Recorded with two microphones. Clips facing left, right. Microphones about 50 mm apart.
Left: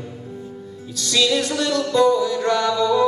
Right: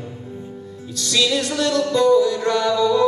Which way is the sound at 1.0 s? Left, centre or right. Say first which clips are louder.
Left 1 dB; centre.